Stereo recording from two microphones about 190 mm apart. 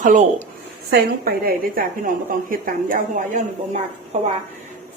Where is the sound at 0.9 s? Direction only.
55° right (ahead or behind).